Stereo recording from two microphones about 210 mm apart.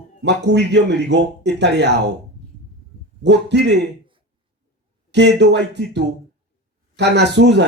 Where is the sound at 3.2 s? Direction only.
55° right (ahead or behind).